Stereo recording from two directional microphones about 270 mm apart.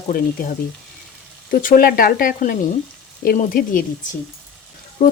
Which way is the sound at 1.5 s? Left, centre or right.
Left.